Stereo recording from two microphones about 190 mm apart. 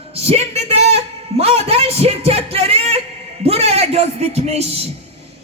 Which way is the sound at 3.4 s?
30° right (ahead or behind).